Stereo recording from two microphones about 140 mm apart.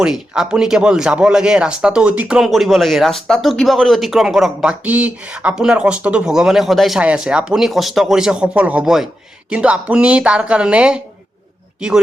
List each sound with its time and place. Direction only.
0.0 s speech: 5° right (ahead or behind)